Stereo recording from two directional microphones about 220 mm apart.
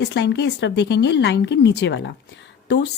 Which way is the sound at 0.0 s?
50° left (ahead or behind).